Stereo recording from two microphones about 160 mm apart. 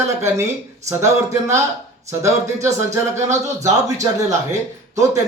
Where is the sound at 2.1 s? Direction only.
20° right (ahead or behind).